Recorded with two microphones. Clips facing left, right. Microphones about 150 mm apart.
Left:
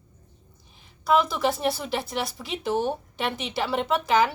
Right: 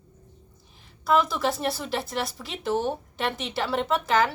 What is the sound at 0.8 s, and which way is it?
A woman's voice, centre (ahead or behind).